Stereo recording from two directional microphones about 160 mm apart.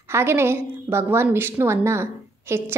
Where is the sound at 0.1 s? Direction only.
15° right (ahead or behind).